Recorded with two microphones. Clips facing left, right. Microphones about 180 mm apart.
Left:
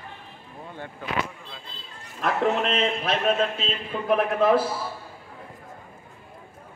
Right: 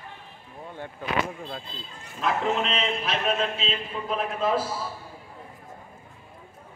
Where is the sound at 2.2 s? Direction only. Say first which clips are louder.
Left 2 dB; 50° left (ahead or behind).